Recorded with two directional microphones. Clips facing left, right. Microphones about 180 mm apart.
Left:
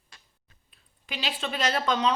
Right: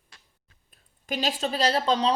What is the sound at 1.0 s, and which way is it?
Speech, 45° right (ahead or behind).